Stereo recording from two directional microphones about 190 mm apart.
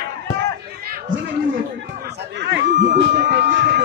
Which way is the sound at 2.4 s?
65° right (ahead or behind).